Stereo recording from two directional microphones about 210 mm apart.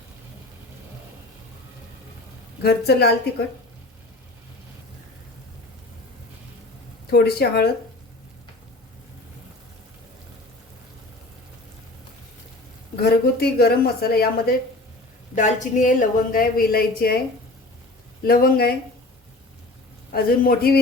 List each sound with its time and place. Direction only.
2.6 s a woman's voice: 50° left (ahead or behind)
7.1 s a woman's voice: 50° left (ahead or behind)
13.0 s a woman's voice: 50° left (ahead or behind)
15.4 s a woman's voice: 35° left (ahead or behind)
18.3 s a woman's voice: 45° left (ahead or behind)
20.1 s a woman's voice: 45° left (ahead or behind)